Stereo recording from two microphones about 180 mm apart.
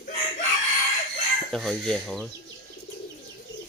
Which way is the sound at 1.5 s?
Centre (ahead or behind).